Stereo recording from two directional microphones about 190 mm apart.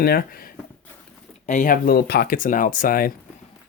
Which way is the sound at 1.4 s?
40° left (ahead or behind).